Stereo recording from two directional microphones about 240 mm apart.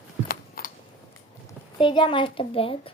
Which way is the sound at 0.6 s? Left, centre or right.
Left.